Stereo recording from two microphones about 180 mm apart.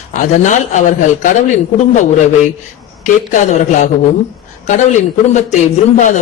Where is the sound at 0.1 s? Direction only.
45° left (ahead or behind).